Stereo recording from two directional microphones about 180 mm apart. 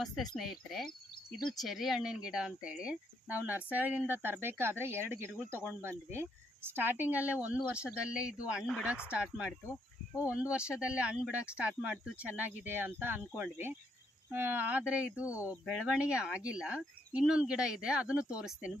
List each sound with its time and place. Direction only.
0.7 s speech: centre (ahead or behind)
15.2 s speech: 15° left (ahead or behind)
16.0 s speech: 5° right (ahead or behind)